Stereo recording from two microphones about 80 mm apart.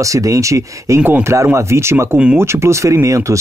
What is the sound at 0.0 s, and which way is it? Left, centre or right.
Speech, right.